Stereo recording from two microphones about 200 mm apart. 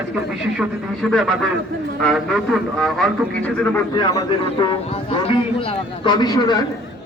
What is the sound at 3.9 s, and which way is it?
A man's voice, 20° left (ahead or behind).